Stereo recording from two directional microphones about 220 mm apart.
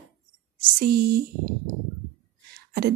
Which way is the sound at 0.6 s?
45° right (ahead or behind).